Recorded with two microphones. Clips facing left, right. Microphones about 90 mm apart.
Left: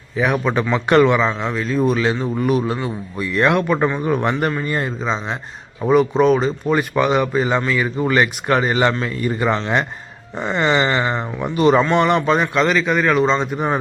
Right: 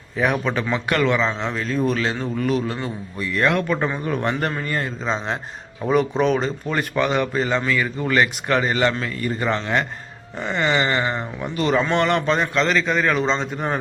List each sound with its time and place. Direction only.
0.2 s a man's voice: centre (ahead or behind)
0.9 s a man's voice: 20° left (ahead or behind); by 1.8 s 5° left (ahead or behind)
1.8 s a man's voice: 15° left (ahead or behind)
5.0 s a man's voice: centre (ahead or behind)